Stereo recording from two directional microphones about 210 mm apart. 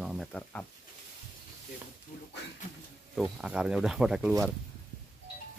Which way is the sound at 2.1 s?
35° left (ahead or behind).